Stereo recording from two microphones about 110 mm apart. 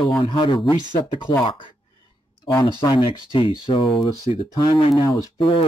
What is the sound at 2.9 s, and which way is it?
Speech, 50° left (ahead or behind).